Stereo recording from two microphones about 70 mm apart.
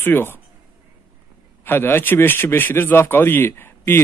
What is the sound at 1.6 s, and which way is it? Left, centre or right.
A man's voice, left.